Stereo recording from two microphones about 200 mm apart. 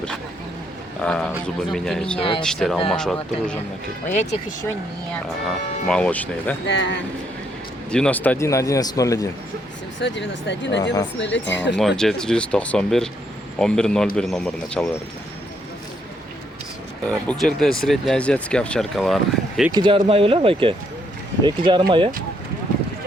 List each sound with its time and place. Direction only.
1.0 s speech: 5° left (ahead or behind)
4.0 s speech: 35° left (ahead or behind)
5.1 s a man's voice: 5° left (ahead or behind)
6.7 s speech: 60° left (ahead or behind)
7.9 s a man's voice: 5° left (ahead or behind)
10.0 s speech: 60° left (ahead or behind)
11.8 s speech: centre (ahead or behind)
17.1 s speech: 5° left (ahead or behind)
19.7 s speech: 25° right (ahead or behind)